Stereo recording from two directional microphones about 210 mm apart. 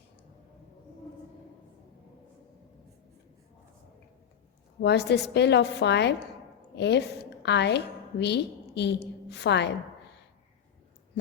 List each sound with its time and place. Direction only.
4.8 s a woman's voice: 55° left (ahead or behind)